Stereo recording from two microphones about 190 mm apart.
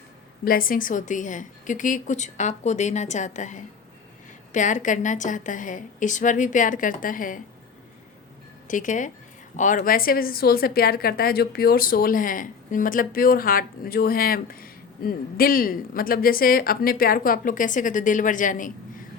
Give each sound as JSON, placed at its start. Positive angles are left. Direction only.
{"t": 0.4, "sound": "a woman's voice", "side_deg": 50}
{"t": 8.6, "sound": "a woman's voice", "side_deg": 45}